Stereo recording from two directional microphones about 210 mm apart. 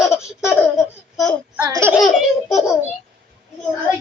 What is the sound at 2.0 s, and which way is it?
Speech, centre (ahead or behind).